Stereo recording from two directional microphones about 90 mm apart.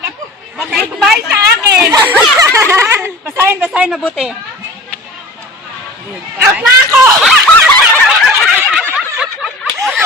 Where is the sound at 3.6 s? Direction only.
10° right (ahead or behind).